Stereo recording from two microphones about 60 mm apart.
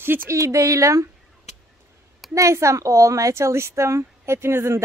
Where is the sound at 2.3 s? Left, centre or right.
Right.